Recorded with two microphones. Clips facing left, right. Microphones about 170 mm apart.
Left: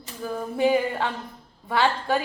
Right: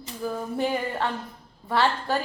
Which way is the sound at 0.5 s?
5° left (ahead or behind).